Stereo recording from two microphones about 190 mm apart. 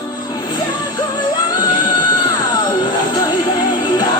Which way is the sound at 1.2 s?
20° left (ahead or behind).